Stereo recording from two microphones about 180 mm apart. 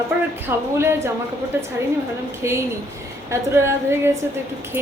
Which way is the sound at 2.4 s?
15° right (ahead or behind).